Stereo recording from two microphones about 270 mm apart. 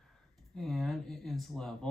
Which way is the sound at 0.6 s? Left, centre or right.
Centre.